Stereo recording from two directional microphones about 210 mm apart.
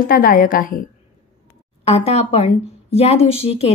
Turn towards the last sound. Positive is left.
turn(degrees=30)  # may be behind; listen again after turning